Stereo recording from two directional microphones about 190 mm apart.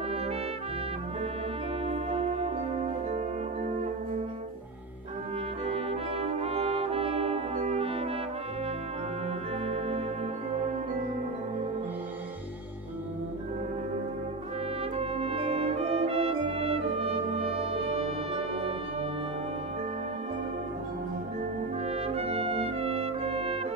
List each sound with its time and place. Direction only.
1.9 s brass instrument: 35° right (ahead or behind)
5.7 s brass instrument: 30° right (ahead or behind)
9.7 s music: 30° right (ahead or behind)
15.0 s brass instrument: 30° right (ahead or behind)
22.0 s brass instrument: 30° right (ahead or behind)